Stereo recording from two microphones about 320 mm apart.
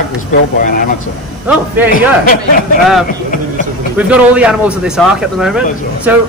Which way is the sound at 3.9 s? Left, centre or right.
Centre.